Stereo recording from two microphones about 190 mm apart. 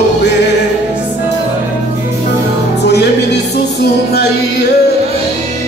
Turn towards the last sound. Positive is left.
turn(degrees=60)  # may be behind; listen again after turning